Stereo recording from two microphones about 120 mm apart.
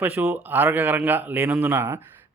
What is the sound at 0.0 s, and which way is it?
Speech, 15° right (ahead or behind).